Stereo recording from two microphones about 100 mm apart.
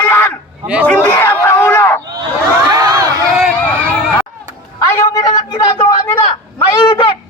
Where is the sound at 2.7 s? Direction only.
45° right (ahead or behind).